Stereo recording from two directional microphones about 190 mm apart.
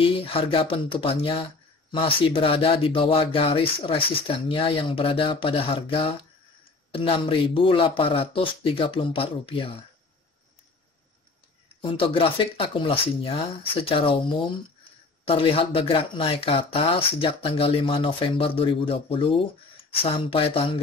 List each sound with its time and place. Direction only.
0.0 s speech: 30° left (ahead or behind)
11.8 s speech: 25° left (ahead or behind)